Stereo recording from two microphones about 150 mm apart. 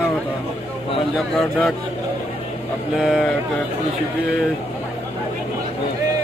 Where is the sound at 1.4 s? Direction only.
Centre (ahead or behind).